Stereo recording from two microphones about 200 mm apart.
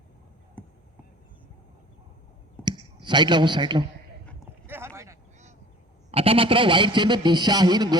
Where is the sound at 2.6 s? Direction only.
20° right (ahead or behind).